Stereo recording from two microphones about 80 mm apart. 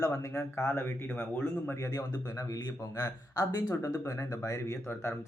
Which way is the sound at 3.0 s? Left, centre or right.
Left.